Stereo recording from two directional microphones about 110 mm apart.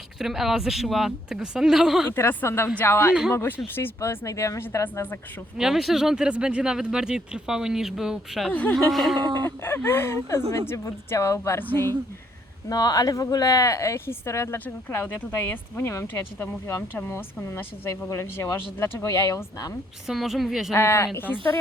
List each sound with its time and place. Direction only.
0.2 s speech: 5° right (ahead or behind)
2.1 s speech: 20° left (ahead or behind)
5.5 s speech: 5° right (ahead or behind)
8.4 s speech: 15° left (ahead or behind)
8.9 s speech: centre (ahead or behind)
9.1 s speech: 40° right (ahead or behind)
9.4 s speech: 20° left (ahead or behind)
12.6 s speech: 35° left (ahead or behind)
20.1 s speech: 5° right (ahead or behind)
20.7 s speech: 25° left (ahead or behind)